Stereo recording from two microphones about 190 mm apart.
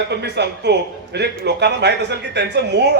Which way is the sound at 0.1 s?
60° right (ahead or behind).